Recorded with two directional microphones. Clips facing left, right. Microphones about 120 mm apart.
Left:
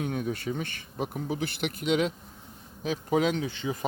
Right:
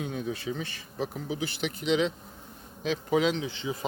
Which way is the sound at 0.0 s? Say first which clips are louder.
Left 2 dB; 55° left (ahead or behind).